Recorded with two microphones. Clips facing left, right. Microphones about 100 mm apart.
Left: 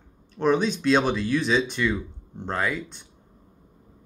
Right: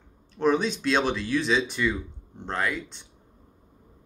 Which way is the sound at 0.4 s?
Centre (ahead or behind).